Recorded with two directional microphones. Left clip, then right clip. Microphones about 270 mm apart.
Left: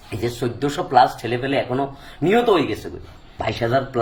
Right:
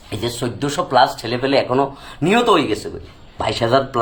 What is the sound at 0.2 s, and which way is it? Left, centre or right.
A man's voice, centre.